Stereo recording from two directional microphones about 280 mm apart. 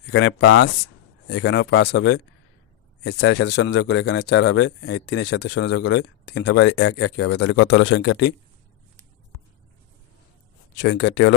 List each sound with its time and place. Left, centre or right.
0.0 s speech: left
10.8 s speech: left